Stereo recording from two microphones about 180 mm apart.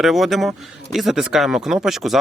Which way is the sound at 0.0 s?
Centre (ahead or behind).